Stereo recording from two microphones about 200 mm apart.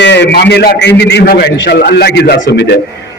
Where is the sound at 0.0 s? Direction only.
60° left (ahead or behind).